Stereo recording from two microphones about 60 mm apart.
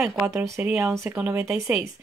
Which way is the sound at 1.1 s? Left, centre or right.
Right.